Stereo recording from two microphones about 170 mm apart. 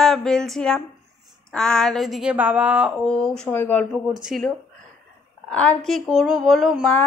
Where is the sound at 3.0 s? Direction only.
5° left (ahead or behind).